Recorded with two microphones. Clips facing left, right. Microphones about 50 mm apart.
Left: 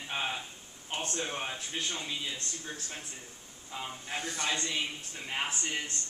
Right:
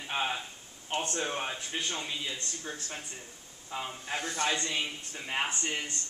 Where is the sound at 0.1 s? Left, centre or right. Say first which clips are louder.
Right 3 dB; centre.